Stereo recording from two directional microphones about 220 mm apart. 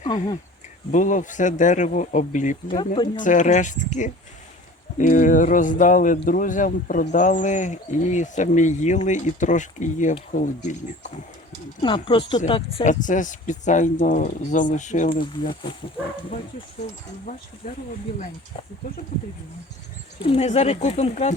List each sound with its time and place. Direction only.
0.9 s speech: 35° left (ahead or behind)
2.6 s speech: 20° left (ahead or behind)
3.2 s speech: 35° left (ahead or behind)
4.9 s speech: 35° left (ahead or behind)
11.8 s speech: 20° left (ahead or behind)
15.2 s speech: 20° left (ahead or behind)
20.2 s speech: 30° left (ahead or behind)